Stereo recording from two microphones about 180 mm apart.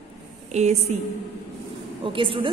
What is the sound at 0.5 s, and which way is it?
Speech, 40° right (ahead or behind).